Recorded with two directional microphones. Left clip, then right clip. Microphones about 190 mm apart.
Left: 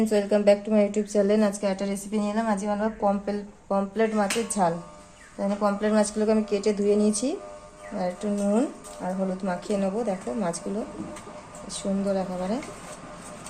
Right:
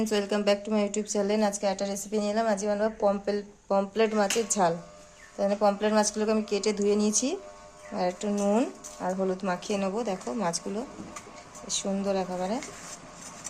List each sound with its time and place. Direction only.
0.0 s a woman's voice: 30° right (ahead or behind)
11.8 s speech: 35° right (ahead or behind)